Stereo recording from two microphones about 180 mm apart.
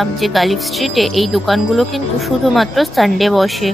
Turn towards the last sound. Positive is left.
turn(degrees=0)  # may be behind; listen again after turning